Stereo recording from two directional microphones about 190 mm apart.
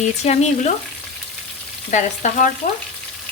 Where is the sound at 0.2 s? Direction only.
35° left (ahead or behind).